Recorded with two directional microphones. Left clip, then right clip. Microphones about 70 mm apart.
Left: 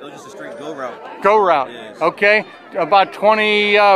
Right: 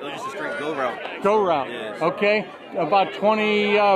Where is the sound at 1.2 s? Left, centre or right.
Left.